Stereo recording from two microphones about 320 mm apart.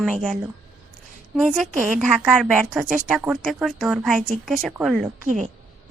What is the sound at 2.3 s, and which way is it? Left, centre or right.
A woman's voice, centre.